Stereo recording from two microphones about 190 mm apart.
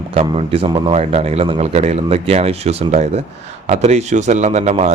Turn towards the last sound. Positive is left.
turn(degrees=-35)  # may be behind; listen again after turning